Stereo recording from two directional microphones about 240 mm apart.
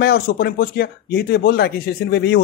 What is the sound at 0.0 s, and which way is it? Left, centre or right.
Speech, left.